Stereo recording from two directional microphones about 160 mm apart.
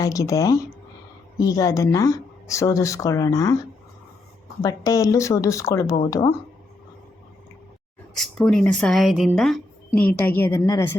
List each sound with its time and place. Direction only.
0.0 s speech: 20° left (ahead or behind)
4.6 s speech: 20° left (ahead or behind)
8.1 s speech: 5° left (ahead or behind)